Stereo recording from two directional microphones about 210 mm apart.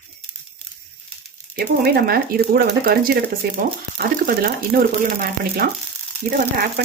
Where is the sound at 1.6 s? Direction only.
50° right (ahead or behind).